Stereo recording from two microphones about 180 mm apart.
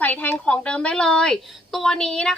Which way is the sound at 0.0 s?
10° left (ahead or behind).